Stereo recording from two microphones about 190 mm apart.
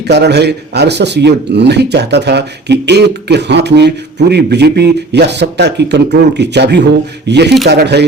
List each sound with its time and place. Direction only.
0.1 s speech: 65° right (ahead or behind)